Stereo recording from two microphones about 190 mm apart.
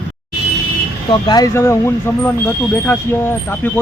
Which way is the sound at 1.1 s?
25° left (ahead or behind).